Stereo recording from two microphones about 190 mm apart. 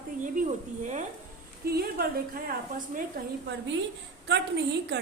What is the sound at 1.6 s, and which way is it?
A woman's voice, 55° right (ahead or behind).